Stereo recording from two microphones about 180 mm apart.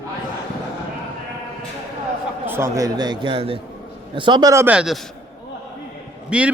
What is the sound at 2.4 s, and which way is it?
A man's voice, 15° right (ahead or behind).